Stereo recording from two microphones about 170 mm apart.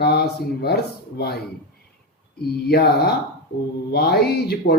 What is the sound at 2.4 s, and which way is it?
Mantra, 70° left (ahead or behind).